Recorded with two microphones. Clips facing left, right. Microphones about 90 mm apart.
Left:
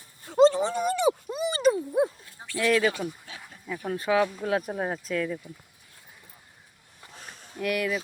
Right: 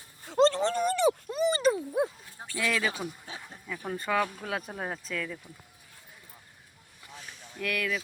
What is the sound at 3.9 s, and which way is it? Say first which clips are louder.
Speech: left 5 dB; 5° left (ahead or behind).